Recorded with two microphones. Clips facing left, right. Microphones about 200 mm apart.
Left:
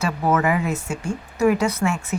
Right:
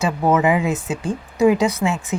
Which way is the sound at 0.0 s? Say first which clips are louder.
Right 3 dB; 20° right (ahead or behind).